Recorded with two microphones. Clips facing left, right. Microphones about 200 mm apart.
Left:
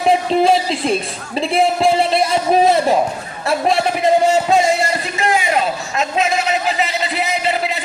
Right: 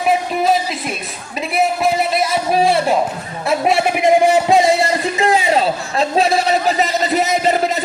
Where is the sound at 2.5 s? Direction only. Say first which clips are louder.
Left 2 dB; 20° left (ahead or behind).